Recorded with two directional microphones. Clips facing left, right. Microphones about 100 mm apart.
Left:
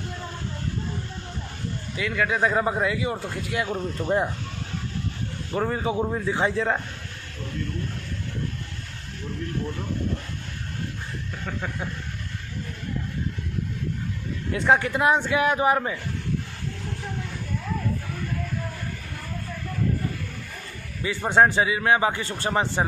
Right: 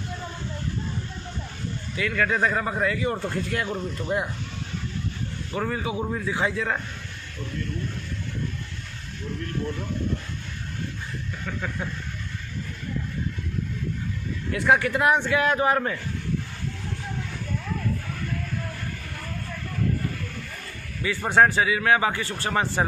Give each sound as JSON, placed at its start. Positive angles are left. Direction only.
{"t": 2.0, "sound": "a man's voice", "side_deg": 15}
{"t": 5.5, "sound": "a man's voice", "side_deg": 25}
{"t": 14.5, "sound": "a man's voice", "side_deg": 25}
{"t": 21.3, "sound": "a man's voice", "side_deg": 20}